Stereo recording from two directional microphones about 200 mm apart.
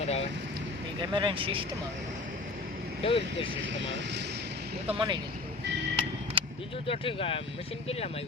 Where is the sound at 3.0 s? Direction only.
25° left (ahead or behind).